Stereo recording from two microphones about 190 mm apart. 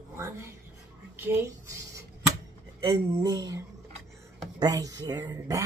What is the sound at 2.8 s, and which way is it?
Speech, 20° right (ahead or behind).